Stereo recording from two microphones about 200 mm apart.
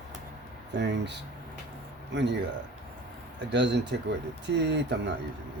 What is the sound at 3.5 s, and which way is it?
Speech, 65° right (ahead or behind).